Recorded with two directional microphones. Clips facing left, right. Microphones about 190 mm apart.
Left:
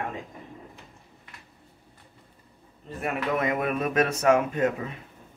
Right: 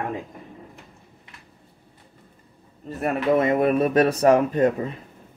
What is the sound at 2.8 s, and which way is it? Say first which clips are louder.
Speech: right 6 dB; 35° right (ahead or behind).